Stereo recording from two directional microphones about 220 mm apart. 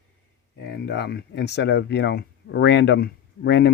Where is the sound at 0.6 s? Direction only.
50° left (ahead or behind).